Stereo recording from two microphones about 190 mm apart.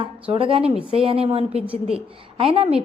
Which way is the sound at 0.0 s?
30° right (ahead or behind).